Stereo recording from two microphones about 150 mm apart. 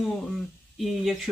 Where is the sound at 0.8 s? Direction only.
Centre (ahead or behind).